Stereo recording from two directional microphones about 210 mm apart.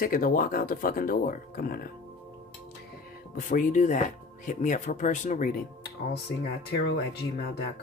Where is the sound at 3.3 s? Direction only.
40° left (ahead or behind).